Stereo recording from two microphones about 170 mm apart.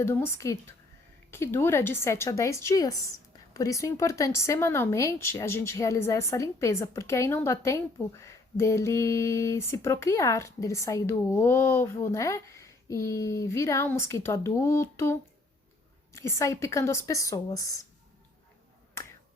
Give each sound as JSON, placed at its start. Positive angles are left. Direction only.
{"t": 0.0, "sound": "speech", "side_deg": 15}